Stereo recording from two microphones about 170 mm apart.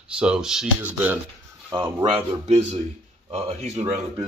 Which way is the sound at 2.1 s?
40° right (ahead or behind).